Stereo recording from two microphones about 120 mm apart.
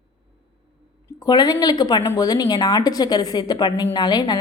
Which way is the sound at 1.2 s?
35° left (ahead or behind).